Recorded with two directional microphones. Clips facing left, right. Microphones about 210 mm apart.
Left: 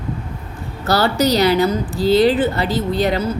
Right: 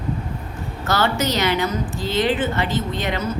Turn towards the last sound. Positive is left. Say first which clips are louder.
# left 6 dB
turn(degrees=35)  # may be behind; listen again after turning